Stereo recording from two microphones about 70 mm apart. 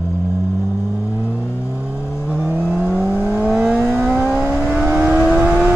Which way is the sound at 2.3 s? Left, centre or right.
Centre.